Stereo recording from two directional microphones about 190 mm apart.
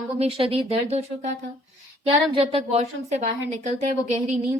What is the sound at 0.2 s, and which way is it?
A woman's voice, 30° right (ahead or behind).